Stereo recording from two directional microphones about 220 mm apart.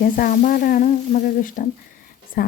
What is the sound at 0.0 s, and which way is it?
Speech, 40° left (ahead or behind).